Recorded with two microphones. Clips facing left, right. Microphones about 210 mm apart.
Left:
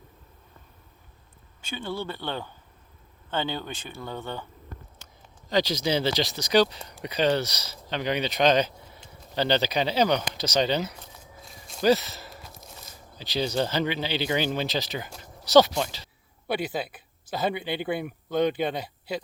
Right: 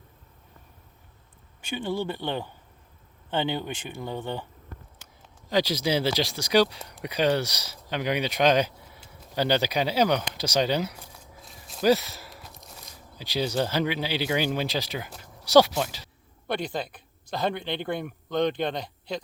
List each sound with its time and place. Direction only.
1.7 s speech: 15° right (ahead or behind)
5.5 s speech: 10° right (ahead or behind)
11.3 s walk: centre (ahead or behind)
12.3 s a sound: centre (ahead or behind)
13.1 s speech: 10° right (ahead or behind)
16.5 s speech: 5° left (ahead or behind)